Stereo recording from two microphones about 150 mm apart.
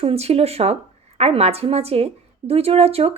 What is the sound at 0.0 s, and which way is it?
A woman's voice, 40° right (ahead or behind).